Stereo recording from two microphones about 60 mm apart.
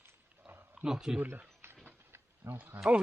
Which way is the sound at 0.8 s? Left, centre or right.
Centre.